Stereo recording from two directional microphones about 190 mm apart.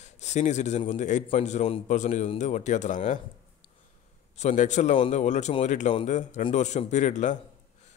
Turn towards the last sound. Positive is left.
turn(degrees=40)  # may be behind; listen again after turning